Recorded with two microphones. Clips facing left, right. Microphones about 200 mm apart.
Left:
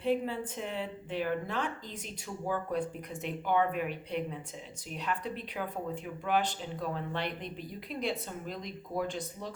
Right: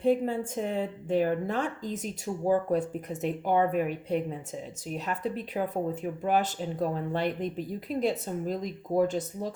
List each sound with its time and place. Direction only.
0.0 s speech: 45° right (ahead or behind)